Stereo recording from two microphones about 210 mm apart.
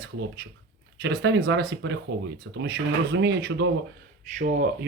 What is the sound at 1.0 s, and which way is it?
Speech, 55° right (ahead or behind).